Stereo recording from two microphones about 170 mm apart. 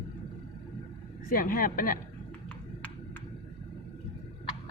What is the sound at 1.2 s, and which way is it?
Speech, 55° left (ahead or behind).